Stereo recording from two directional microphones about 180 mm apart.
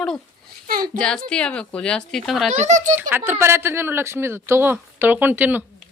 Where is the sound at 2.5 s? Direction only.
40° right (ahead or behind).